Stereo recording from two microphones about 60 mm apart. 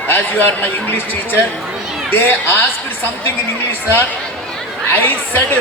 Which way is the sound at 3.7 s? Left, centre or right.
Left.